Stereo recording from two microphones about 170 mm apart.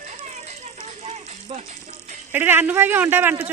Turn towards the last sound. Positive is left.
turn(degrees=-10)  # may be behind; listen again after turning